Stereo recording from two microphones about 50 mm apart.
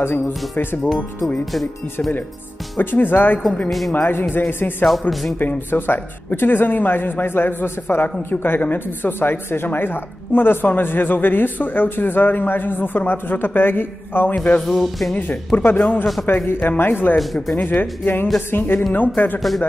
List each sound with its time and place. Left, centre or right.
0.2 s speech: centre
2.8 s a man's voice: left
14.3 s speech: left
14.8 s speech: centre
15.1 s a man's voice: left
17.2 s speech: centre
17.6 s a man's voice: left